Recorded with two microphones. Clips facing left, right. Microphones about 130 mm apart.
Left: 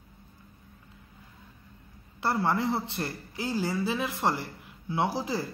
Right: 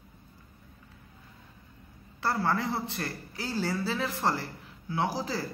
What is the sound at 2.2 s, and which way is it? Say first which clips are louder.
A man's voice: left 2 dB; 20° left (ahead or behind).